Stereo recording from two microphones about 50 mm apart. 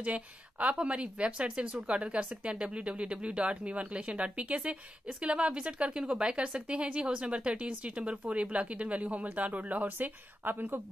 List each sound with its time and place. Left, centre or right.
0.0 s speech: right